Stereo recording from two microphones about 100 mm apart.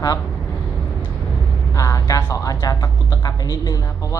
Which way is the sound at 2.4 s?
35° left (ahead or behind).